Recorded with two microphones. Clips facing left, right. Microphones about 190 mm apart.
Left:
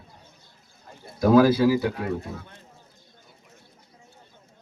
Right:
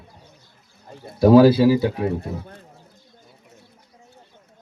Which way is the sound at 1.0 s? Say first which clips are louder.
Right 5 dB; 30° right (ahead or behind).